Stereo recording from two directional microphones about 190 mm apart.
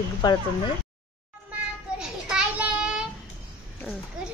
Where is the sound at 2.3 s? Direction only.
5° right (ahead or behind).